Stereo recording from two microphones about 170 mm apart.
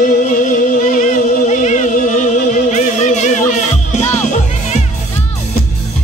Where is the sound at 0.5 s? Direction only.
50° left (ahead or behind).